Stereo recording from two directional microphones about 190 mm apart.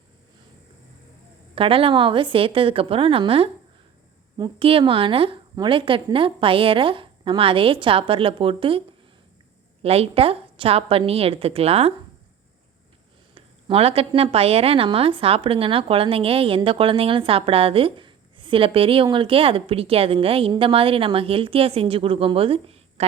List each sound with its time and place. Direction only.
1.5 s a woman's voice: 30° right (ahead or behind)
9.8 s a woman's voice: 30° right (ahead or behind)
13.3 s a woman's voice: 30° right (ahead or behind)